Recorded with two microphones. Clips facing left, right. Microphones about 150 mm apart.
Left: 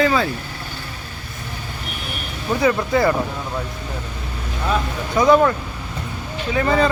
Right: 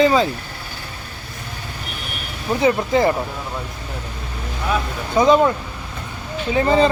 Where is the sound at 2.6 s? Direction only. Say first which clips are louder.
Right 1 dB; 20° right (ahead or behind).